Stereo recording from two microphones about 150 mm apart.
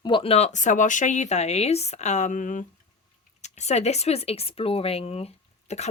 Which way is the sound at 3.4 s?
50° left (ahead or behind).